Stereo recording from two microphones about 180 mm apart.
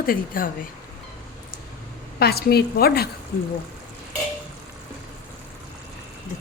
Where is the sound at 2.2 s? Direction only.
60° left (ahead or behind).